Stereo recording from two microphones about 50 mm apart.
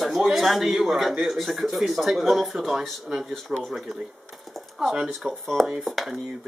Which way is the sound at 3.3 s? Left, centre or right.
Centre.